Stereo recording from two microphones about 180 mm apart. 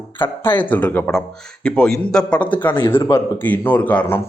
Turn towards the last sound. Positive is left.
turn(degrees=10)  # may be behind; listen again after turning